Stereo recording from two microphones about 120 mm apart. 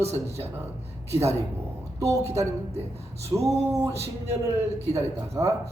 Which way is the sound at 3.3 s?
25° right (ahead or behind).